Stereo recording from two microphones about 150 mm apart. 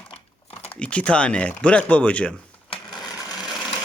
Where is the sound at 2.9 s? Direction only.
25° left (ahead or behind).